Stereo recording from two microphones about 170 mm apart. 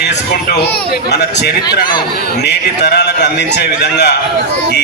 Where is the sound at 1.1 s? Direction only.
70° left (ahead or behind).